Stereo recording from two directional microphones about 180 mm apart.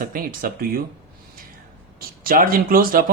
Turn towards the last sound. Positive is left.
turn(degrees=-50)  # may be behind; listen again after turning